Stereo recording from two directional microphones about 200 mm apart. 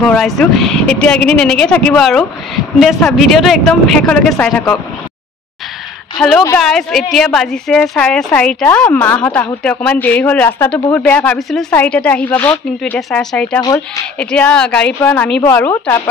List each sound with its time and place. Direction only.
0.0 s a woman's voice: centre (ahead or behind)
6.1 s a woman's voice: centre (ahead or behind)
13.6 s speech: 20° left (ahead or behind)
14.1 s a woman's voice: 5° left (ahead or behind)